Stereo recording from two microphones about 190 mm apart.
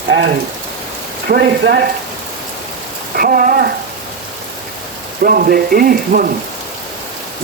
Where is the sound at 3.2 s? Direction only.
50° right (ahead or behind).